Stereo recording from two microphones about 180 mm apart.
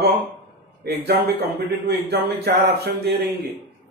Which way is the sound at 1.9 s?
60° right (ahead or behind).